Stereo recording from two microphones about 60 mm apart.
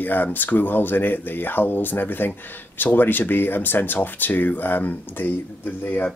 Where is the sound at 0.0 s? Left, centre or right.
Left.